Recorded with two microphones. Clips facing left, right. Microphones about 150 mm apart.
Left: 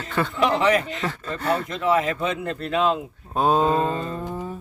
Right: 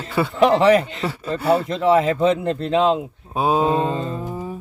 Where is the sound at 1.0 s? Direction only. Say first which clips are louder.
Right 5 dB; 10° right (ahead or behind).